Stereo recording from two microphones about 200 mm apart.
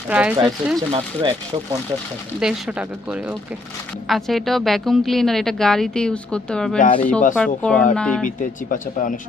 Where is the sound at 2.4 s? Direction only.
5° right (ahead or behind).